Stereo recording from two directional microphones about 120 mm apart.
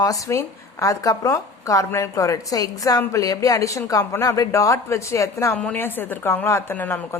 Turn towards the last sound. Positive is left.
turn(degrees=15)  # may be behind; listen again after turning